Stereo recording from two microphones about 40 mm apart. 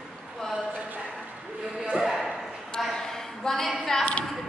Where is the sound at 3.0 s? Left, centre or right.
Centre.